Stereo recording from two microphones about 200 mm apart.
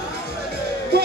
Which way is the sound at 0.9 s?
55° right (ahead or behind).